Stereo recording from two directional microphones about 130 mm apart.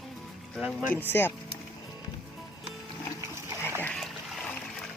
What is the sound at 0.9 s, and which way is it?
Speech, 15° left (ahead or behind).